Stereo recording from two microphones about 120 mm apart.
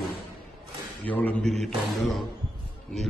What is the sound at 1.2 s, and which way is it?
Speech, 15° left (ahead or behind).